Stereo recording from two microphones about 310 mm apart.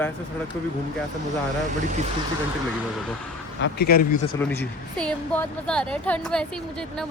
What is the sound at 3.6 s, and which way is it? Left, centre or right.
Speech, left.